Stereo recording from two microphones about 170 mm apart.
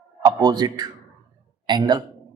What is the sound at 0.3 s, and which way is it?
A man's voice, 25° right (ahead or behind).